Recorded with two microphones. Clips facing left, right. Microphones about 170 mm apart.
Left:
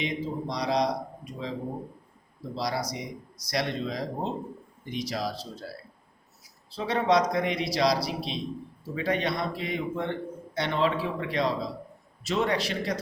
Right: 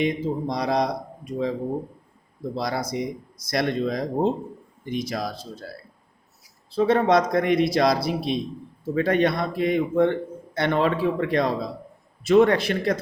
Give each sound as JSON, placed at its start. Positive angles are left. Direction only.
{"t": 0.0, "sound": "a man's voice", "side_deg": -55}
{"t": 2.6, "sound": "a man's voice", "side_deg": -55}
{"t": 6.7, "sound": "a man's voice", "side_deg": -50}